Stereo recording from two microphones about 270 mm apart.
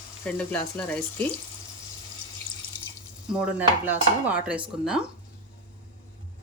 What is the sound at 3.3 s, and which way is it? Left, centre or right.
Dishes, centre.